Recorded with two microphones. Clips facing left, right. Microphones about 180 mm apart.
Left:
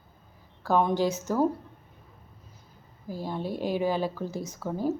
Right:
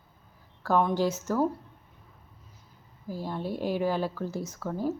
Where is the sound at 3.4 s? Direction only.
10° right (ahead or behind).